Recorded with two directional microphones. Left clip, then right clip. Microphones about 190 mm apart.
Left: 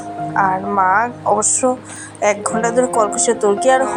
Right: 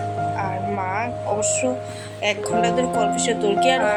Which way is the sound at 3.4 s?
15° left (ahead or behind).